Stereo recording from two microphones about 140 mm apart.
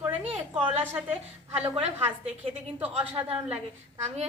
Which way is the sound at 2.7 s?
10° right (ahead or behind).